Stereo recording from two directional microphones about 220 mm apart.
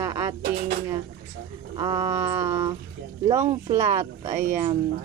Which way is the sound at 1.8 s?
15° right (ahead or behind).